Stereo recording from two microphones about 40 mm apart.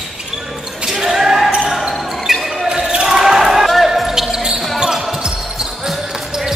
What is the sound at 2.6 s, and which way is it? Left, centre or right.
Basketball bounce, centre.